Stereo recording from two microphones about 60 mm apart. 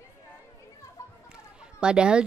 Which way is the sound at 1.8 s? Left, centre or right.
Centre.